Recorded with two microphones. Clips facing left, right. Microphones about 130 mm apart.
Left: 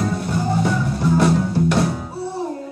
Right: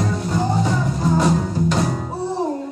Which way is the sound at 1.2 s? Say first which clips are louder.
Left 3 dB; 65° left (ahead or behind).